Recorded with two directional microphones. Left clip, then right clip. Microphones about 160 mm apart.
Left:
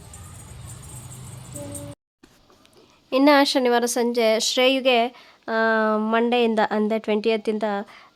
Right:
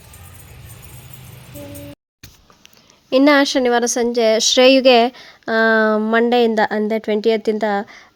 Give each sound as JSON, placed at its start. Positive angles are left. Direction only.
{"t": 3.1, "sound": "a woman's voice", "side_deg": -25}